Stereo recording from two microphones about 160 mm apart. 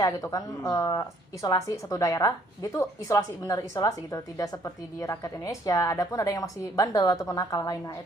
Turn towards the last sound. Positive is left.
turn(degrees=25)  # may be behind; listen again after turning